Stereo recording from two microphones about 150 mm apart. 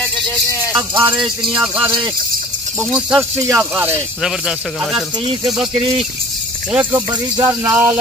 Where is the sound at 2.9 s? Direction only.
5° right (ahead or behind).